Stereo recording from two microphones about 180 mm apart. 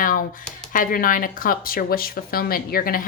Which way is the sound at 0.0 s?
50° left (ahead or behind).